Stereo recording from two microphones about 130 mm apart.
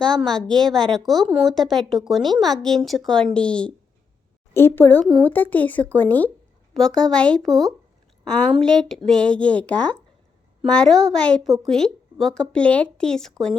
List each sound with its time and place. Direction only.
0.2 s speech: 5° left (ahead or behind)